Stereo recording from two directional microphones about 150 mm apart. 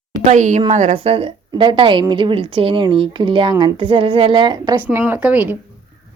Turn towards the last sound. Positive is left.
turn(degrees=-10)  # may be behind; listen again after turning